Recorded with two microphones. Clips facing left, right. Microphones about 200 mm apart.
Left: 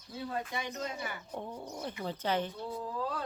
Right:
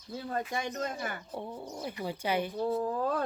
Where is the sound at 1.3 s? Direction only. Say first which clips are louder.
Right 1 dB; 10° right (ahead or behind).